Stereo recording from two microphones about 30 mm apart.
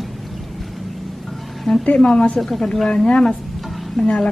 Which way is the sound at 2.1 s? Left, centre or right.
Left.